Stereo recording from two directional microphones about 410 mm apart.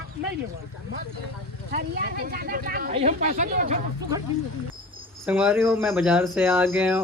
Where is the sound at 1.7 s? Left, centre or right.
Right.